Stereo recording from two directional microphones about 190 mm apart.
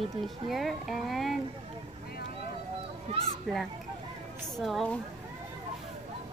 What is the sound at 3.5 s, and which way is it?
A woman's voice, centre (ahead or behind).